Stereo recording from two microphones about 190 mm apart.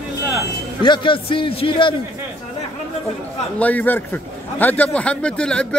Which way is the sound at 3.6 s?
10° left (ahead or behind).